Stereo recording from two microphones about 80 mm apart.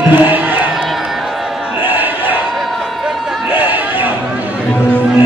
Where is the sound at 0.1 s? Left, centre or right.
Right.